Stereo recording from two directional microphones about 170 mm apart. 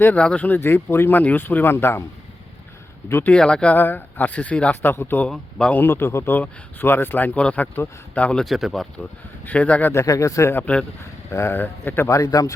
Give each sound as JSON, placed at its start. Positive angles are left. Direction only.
{"t": 0.0, "sound": "speech", "side_deg": 5}
{"t": 3.1, "sound": "speech", "side_deg": 10}